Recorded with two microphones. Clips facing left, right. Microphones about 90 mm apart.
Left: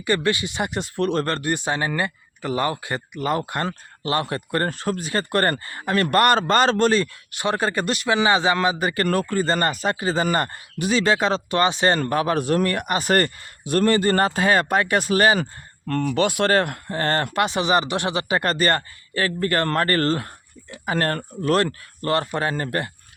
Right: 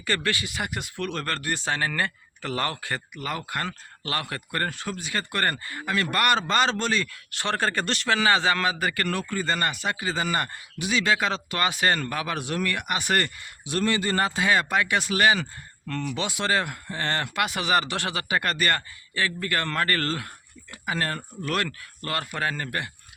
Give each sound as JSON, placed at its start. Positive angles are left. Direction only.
{"t": 0.0, "sound": "speech", "side_deg": 20}
{"t": 3.3, "sound": "speech", "side_deg": 35}
{"t": 7.3, "sound": "a man's voice", "side_deg": 15}
{"t": 9.0, "sound": "speech", "side_deg": 45}
{"t": 12.0, "sound": "a man's voice", "side_deg": 40}
{"t": 15.9, "sound": "speech", "side_deg": 50}
{"t": 20.8, "sound": "a man's voice", "side_deg": 50}
{"t": 21.5, "sound": "speech", "side_deg": 35}